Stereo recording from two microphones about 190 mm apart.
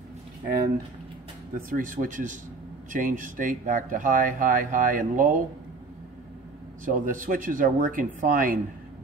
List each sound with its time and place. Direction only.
1.7 s speech: 45° right (ahead or behind)
6.8 s speech: 45° right (ahead or behind)